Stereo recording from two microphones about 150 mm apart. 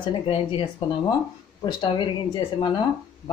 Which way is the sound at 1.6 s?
30° left (ahead or behind).